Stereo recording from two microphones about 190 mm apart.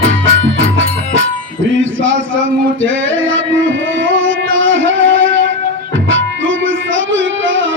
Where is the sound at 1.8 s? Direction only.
80° right.